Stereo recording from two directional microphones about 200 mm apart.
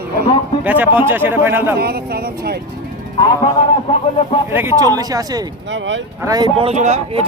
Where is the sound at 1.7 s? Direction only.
50° right (ahead or behind).